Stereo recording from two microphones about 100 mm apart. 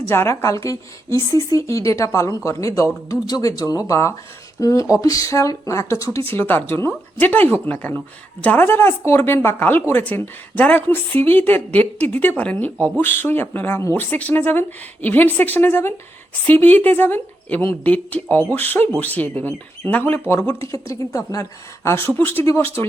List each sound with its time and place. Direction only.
0.1 s a woman's voice: 25° left (ahead or behind)